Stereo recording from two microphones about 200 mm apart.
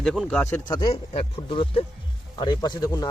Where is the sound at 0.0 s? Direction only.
Centre (ahead or behind).